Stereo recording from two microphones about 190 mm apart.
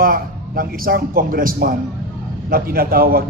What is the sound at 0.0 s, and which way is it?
A man's voice, 50° right (ahead or behind).